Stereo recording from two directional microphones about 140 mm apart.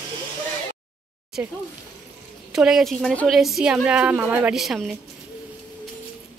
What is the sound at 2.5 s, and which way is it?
A woman's voice, 5° right (ahead or behind).